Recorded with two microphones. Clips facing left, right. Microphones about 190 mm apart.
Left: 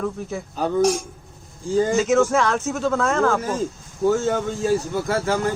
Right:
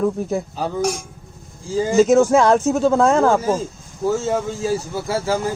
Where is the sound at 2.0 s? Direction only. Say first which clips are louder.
Right 10 dB; 35° right (ahead or behind).